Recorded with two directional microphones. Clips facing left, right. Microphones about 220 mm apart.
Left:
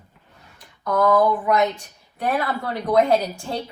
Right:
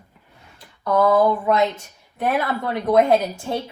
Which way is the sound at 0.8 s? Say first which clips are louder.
Right 1 dB; 30° right (ahead or behind).